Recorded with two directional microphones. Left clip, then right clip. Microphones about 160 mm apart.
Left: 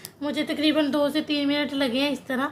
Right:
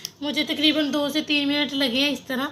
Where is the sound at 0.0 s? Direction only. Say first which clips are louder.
Right 2 dB; 5° left (ahead or behind).